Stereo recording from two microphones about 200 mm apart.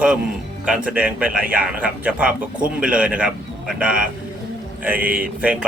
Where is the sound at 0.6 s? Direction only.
5° right (ahead or behind).